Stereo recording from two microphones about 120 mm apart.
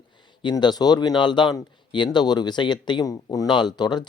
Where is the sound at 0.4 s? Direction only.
35° left (ahead or behind).